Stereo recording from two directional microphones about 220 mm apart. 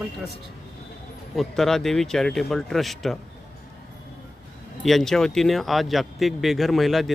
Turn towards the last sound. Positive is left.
turn(degrees=0)  # may be behind; listen again after turning